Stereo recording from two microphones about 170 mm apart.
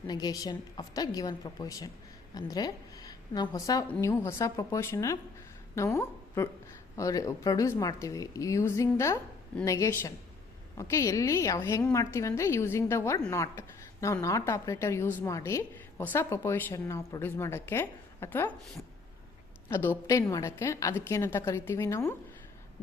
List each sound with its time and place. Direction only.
0.1 s a woman's voice: 25° left (ahead or behind)
19.6 s a woman's voice: 10° left (ahead or behind)